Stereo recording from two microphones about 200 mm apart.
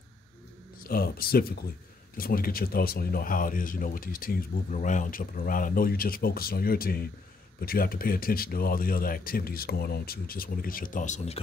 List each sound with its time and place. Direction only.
0.8 s speech: 50° left (ahead or behind)